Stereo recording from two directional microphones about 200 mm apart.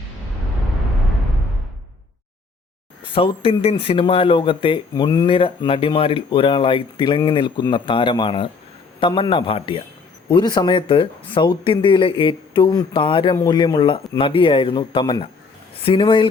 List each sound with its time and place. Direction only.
3.0 s speech: 25° left (ahead or behind)